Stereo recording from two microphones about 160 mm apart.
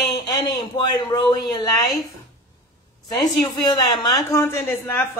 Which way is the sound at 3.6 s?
25° left (ahead or behind).